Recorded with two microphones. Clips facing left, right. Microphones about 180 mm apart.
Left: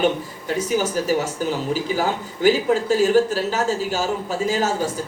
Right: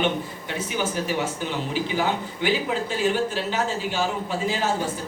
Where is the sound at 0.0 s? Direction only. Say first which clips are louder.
Left 4 dB; 40° left (ahead or behind).